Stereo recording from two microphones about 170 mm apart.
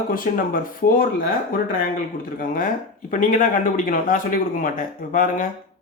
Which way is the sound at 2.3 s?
55° left (ahead or behind).